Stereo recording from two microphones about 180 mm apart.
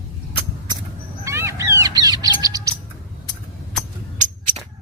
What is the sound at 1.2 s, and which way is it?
Bird, 15° right (ahead or behind).